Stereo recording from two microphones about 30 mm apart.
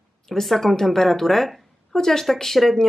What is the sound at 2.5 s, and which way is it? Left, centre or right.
Speech, centre.